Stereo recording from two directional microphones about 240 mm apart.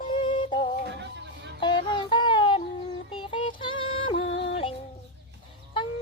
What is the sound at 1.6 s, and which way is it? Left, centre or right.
Music, centre.